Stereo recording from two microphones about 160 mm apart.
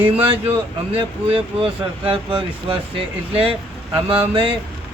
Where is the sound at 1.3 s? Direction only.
35° right (ahead or behind).